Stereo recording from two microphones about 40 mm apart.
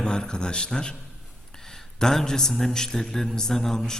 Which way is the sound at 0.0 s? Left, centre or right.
Centre.